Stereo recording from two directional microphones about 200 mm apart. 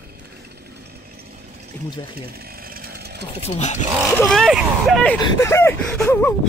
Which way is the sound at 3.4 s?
35° left (ahead or behind).